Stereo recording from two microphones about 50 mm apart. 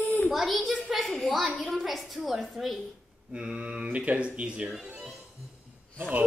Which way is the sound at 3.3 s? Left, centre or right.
Right.